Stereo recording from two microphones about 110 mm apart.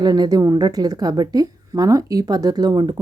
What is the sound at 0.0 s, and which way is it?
A woman's voice, 40° right (ahead or behind).